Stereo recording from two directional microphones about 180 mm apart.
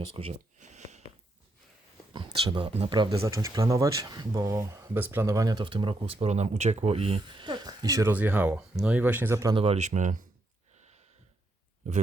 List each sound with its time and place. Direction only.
0.1 s a sound: 30° right (ahead or behind)
2.1 s speech: 25° right (ahead or behind)
9.6 s speech: 35° right (ahead or behind)